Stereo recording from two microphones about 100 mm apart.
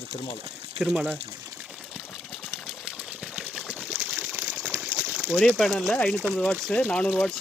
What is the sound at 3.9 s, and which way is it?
Water, 25° right (ahead or behind).